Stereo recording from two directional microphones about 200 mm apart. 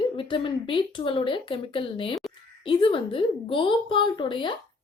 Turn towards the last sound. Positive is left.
turn(degrees=25)  # may be behind; listen again after turning